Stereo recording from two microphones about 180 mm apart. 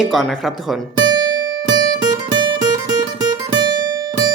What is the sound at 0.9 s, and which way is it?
Music, 25° right (ahead or behind).